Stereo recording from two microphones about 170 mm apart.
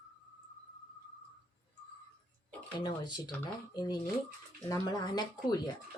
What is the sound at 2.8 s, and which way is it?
Speech, 25° left (ahead or behind).